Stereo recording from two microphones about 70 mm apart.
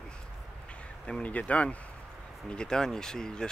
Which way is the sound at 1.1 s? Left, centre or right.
Centre.